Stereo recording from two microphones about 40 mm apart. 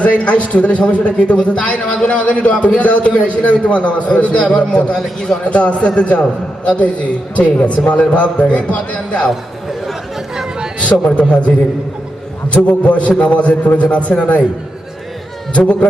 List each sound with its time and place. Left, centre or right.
0.0 s a man's voice: left
10.8 s a man's voice: left
15.5 s a man's voice: left